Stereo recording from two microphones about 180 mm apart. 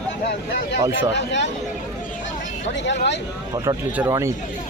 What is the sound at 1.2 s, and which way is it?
Speech, 75° left (ahead or behind).